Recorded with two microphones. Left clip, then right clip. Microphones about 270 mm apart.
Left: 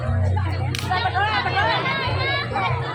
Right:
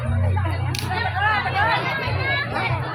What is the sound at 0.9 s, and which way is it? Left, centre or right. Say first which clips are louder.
Hubbub: even; left.